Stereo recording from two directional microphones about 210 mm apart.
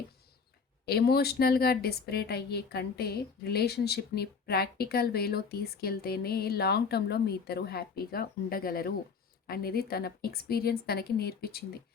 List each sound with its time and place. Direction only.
0.9 s a woman's voice: 50° left (ahead or behind)